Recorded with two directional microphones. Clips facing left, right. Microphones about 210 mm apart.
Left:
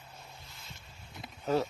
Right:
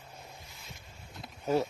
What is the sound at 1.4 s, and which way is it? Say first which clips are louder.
Speech: right 1 dB; 10° right (ahead or behind).